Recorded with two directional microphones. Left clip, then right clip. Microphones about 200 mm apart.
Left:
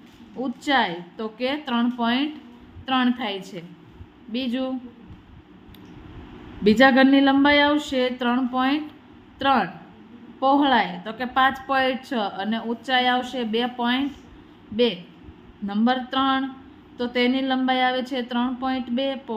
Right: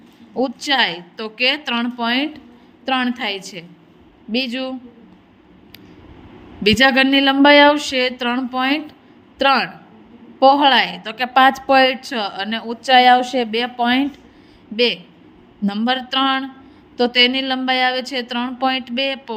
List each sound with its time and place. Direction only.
0.3 s a woman's voice: 35° right (ahead or behind)
6.6 s a woman's voice: 40° right (ahead or behind)
15.6 s a woman's voice: 35° right (ahead or behind)